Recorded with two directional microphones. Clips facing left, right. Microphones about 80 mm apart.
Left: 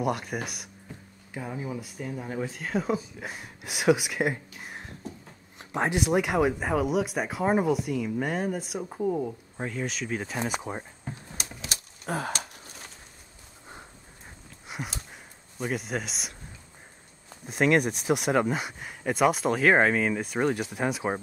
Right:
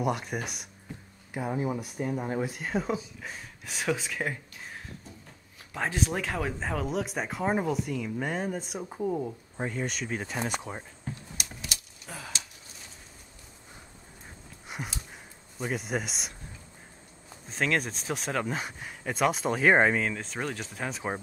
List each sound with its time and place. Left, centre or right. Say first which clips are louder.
0.0 s speech: left 1 dB; centre
1.8 s speech: right 4 dB; centre
2.4 s speech: left 1 dB; centre
3.2 s speech: left 3 dB; centre
5.6 s a sound: left 5 dB; left
5.9 s speech: left 5 dB; centre
11.3 s typewriter: left 2 dB; left
12.1 s a sound: left 10 dB; left
14.7 s a sound: left 2 dB; centre
15.5 s speech: left 1 dB; centre
17.5 s speech: left 6 dB; centre
20.1 s speech: left 7 dB; centre